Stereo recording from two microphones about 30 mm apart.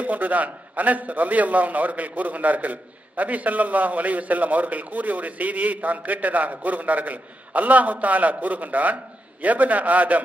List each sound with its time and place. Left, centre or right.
0.0 s a man's voice: right